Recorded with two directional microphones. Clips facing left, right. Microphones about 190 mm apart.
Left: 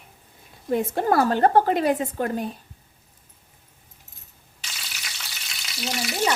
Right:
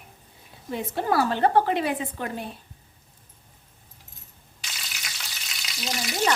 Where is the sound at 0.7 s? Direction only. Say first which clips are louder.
Left 4 dB; 50° left (ahead or behind).